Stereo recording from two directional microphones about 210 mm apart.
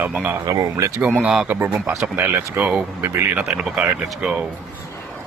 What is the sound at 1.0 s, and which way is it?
Speech, 5° right (ahead or behind).